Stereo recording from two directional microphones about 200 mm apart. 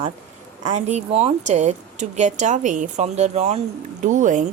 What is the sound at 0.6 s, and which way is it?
A woman's voice, 35° right (ahead or behind).